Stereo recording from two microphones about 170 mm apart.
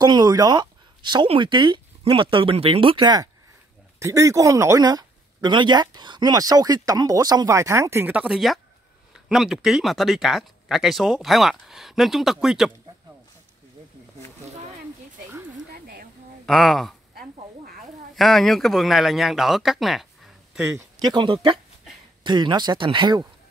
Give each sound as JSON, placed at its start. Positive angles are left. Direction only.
{"t": 0.0, "sound": "speech", "side_deg": -25}
{"t": 15.7, "sound": "a sound", "side_deg": -60}
{"t": 16.4, "sound": "speech", "side_deg": 0}
{"t": 17.1, "sound": "a sound", "side_deg": -60}
{"t": 18.1, "sound": "speech", "side_deg": 0}
{"t": 20.7, "sound": "speech", "side_deg": -25}